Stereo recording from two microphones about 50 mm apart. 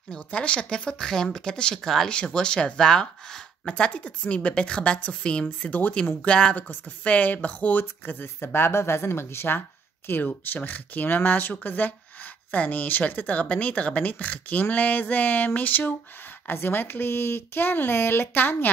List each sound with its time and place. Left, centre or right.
0.1 s a woman's voice: left
6.2 s a woman's voice: centre
7.1 s speech: left
7.8 s speech: left
10.2 s speech: left